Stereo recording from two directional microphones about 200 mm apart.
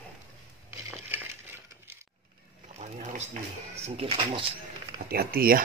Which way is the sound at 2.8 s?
35° right (ahead or behind).